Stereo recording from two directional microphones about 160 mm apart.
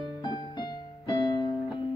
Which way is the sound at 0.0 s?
30° left (ahead or behind).